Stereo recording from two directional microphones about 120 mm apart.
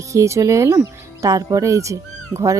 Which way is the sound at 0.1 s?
25° right (ahead or behind).